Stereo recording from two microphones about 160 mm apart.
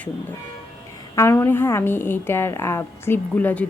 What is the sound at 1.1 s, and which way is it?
A woman's voice, 15° left (ahead or behind).